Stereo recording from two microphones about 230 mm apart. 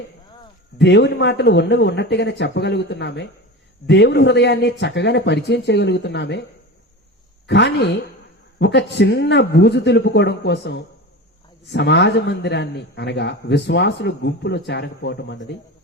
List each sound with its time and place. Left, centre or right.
0.8 s a man's voice: left
7.4 s a man's voice: left